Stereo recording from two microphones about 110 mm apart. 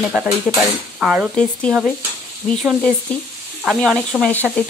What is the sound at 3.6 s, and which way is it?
Speech, 5° left (ahead or behind).